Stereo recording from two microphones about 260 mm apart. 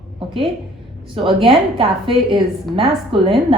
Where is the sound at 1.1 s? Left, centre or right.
Centre.